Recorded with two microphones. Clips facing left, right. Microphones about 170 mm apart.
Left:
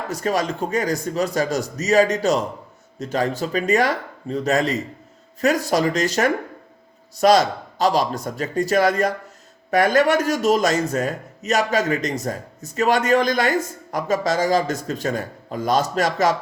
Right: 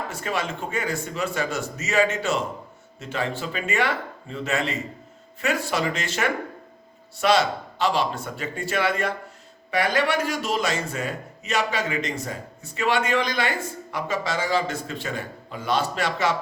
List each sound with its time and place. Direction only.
0.1 s a man's voice: 40° left (ahead or behind)